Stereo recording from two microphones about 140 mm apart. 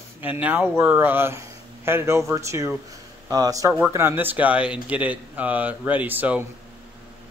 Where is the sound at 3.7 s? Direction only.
15° right (ahead or behind).